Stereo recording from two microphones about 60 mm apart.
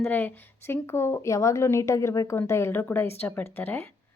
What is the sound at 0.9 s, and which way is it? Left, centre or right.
A woman's voice, left.